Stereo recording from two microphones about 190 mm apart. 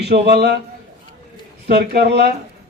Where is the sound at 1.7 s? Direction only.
60° right (ahead or behind).